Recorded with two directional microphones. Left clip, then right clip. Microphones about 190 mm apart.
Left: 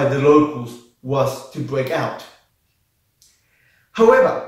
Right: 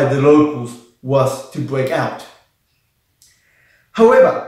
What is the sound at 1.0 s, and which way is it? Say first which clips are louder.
Speech: right 4 dB; 15° right (ahead or behind).